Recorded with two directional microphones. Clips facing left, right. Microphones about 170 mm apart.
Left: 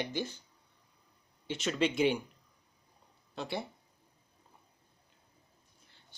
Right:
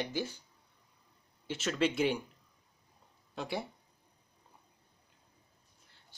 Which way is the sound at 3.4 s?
10° right (ahead or behind).